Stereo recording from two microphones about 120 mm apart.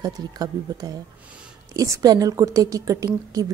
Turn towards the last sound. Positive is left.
turn(degrees=-30)  # may be behind; listen again after turning